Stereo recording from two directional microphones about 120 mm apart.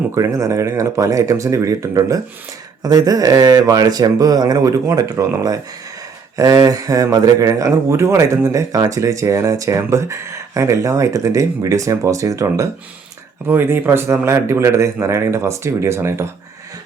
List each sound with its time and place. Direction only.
0.1 s speech: 25° right (ahead or behind)
13.5 s speech: 15° right (ahead or behind)